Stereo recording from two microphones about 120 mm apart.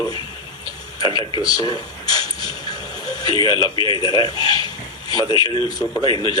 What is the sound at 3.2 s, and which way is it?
Speech, 45° right (ahead or behind).